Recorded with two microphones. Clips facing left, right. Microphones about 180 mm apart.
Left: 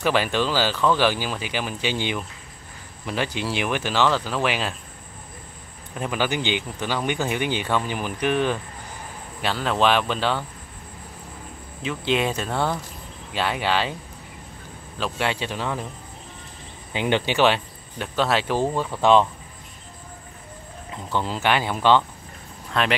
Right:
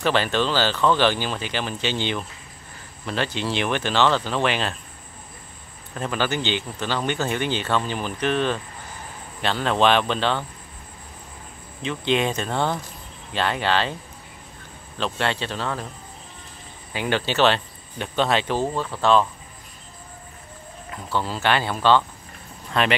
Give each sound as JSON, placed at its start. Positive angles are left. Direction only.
{"t": 0.0, "sound": "speech", "side_deg": 10}
{"t": 5.9, "sound": "speech", "side_deg": 10}
{"t": 11.8, "sound": "speech", "side_deg": 5}
{"t": 15.0, "sound": "speech", "side_deg": 10}
{"t": 16.9, "sound": "speech", "side_deg": 20}
{"t": 20.9, "sound": "speech", "side_deg": 20}
{"t": 22.7, "sound": "speech", "side_deg": 0}